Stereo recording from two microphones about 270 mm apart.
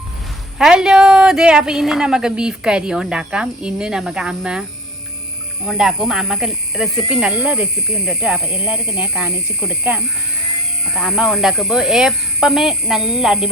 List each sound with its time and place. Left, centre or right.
0.6 s speech: centre
5.6 s speech: centre